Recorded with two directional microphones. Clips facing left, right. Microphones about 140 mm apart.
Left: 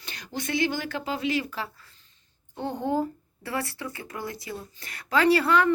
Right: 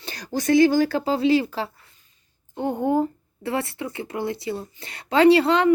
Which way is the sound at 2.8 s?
20° right (ahead or behind).